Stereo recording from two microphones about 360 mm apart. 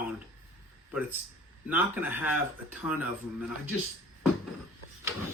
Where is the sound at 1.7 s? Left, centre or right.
Centre.